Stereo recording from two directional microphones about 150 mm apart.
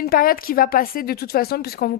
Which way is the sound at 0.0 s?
80° left.